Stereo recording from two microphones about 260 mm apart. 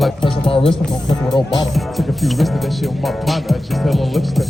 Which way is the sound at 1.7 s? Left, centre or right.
Centre.